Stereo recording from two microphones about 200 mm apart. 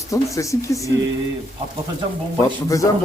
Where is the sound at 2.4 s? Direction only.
15° left (ahead or behind).